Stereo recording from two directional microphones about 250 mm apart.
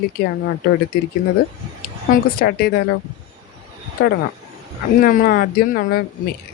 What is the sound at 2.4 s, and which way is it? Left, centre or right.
Speech, left.